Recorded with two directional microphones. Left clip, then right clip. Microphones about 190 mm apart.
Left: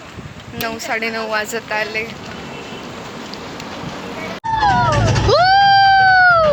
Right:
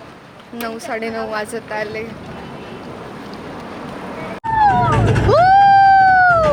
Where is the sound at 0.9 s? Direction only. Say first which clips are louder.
Left 3 dB; 15° right (ahead or behind).